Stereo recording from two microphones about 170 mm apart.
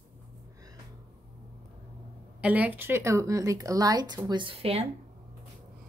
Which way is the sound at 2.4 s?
10° right (ahead or behind).